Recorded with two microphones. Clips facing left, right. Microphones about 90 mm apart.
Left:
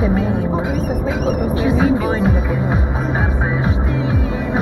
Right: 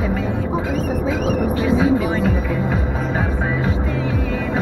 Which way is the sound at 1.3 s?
20° left (ahead or behind).